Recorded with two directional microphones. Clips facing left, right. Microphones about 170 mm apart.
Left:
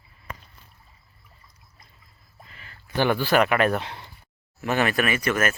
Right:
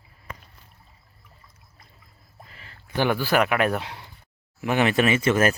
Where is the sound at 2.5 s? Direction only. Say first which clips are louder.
Right 1 dB; 35° right (ahead or behind).